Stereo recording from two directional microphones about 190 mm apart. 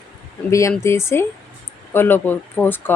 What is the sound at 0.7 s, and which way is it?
A woman's voice, 15° left (ahead or behind).